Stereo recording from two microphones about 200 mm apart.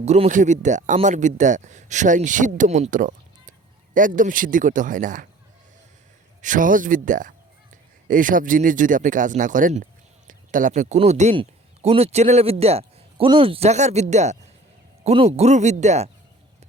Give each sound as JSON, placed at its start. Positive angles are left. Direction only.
{"t": 0.0, "sound": "speech", "side_deg": -35}
{"t": 6.4, "sound": "speech", "side_deg": -40}